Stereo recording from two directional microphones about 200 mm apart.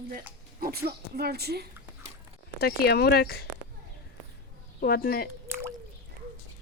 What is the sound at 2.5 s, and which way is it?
Speech, 50° left (ahead or behind).